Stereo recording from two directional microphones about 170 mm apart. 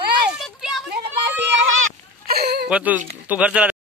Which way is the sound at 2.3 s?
70° right (ahead or behind).